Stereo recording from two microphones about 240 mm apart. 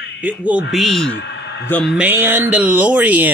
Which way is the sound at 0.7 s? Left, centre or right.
Centre.